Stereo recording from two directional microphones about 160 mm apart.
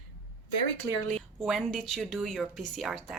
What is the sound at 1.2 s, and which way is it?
A woman's voice, centre (ahead or behind).